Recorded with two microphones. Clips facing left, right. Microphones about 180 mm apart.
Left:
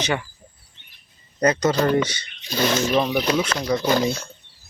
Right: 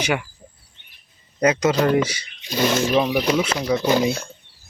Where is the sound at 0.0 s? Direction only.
10° right (ahead or behind).